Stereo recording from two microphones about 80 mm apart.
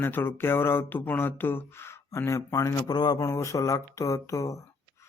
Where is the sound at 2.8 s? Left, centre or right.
Left.